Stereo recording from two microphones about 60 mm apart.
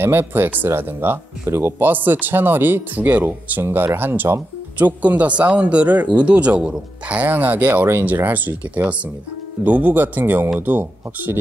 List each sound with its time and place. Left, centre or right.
0.0 s speech: right; by 7.2 s centre
7.2 s speech: right